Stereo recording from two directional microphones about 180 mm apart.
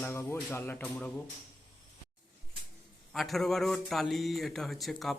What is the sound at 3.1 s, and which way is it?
A man's voice, centre (ahead or behind).